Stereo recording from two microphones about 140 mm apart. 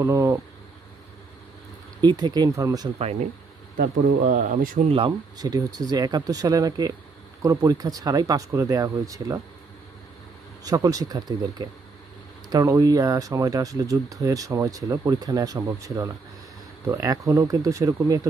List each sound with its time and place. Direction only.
0.0 s speech: 20° right (ahead or behind)
2.0 s speech: 30° right (ahead or behind)
3.0 s speech: 50° right (ahead or behind)
4.3 s speech: 65° right (ahead or behind)
5.4 s speech: 25° right (ahead or behind)
10.6 s speech: 25° right (ahead or behind)